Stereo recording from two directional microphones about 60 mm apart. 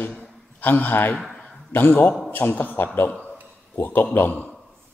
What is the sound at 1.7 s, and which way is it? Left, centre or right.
A man's voice, left.